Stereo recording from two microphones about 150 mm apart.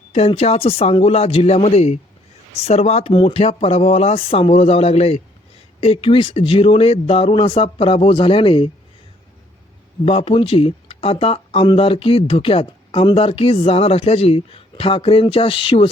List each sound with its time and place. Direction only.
0.1 s speech: 40° left (ahead or behind)
10.1 s speech: 40° left (ahead or behind)